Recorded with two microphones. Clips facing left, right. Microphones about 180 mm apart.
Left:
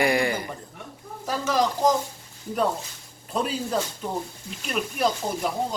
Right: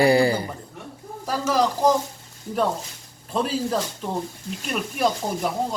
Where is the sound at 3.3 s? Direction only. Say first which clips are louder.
Right 2 dB; centre (ahead or behind).